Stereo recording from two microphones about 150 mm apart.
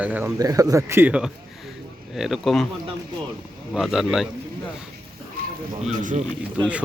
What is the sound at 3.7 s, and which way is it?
Speech, 5° right (ahead or behind).